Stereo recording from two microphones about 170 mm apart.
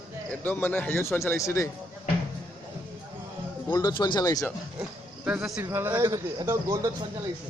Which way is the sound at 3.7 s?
25° left (ahead or behind).